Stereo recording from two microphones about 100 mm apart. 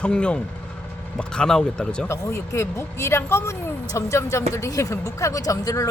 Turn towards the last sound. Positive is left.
turn(degrees=35)  # may be behind; listen again after turning